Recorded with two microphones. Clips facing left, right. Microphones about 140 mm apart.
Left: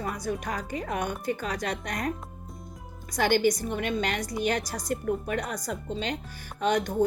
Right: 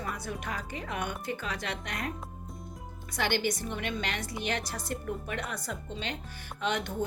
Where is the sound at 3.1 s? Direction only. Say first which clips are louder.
Left 7 dB; 45° left (ahead or behind).